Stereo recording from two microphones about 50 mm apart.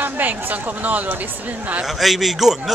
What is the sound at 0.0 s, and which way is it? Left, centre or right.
Speech, right.